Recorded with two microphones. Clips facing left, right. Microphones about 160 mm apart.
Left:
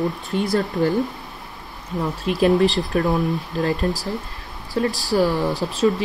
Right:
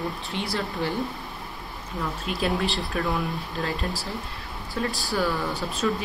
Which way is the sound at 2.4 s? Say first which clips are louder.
Left 10 dB; 40° left (ahead or behind).